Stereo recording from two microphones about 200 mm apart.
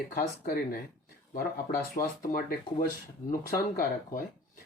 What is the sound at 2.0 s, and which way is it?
Speech, 45° left (ahead or behind).